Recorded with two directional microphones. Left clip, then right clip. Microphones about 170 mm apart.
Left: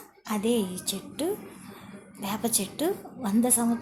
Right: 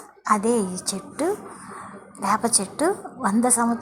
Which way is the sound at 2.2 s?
20° left (ahead or behind).